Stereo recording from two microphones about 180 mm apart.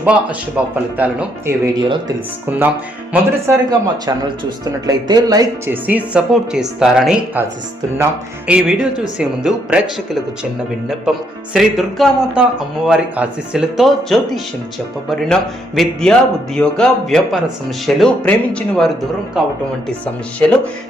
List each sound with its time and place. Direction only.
0.0 s speech: 5° right (ahead or behind)
5.7 s speech: 10° right (ahead or behind)
8.4 s speech: 5° right (ahead or behind)
11.5 s speech: centre (ahead or behind)